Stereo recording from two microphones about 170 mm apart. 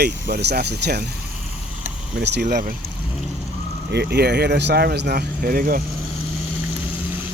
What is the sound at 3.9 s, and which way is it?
Speech, 75° right (ahead or behind).